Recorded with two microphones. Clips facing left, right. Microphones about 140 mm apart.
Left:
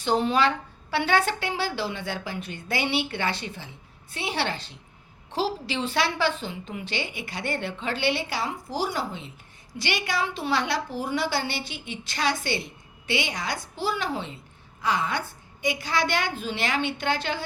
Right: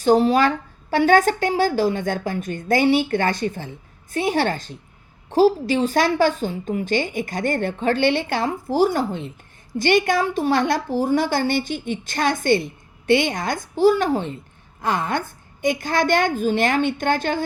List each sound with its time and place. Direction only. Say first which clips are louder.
0.0 s a woman's voice: right 7 dB; 40° right (ahead or behind)